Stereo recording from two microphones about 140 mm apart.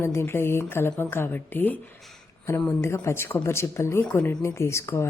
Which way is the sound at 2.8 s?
20° left (ahead or behind).